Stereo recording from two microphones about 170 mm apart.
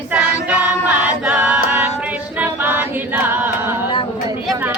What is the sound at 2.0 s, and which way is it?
Singing, 10° right (ahead or behind).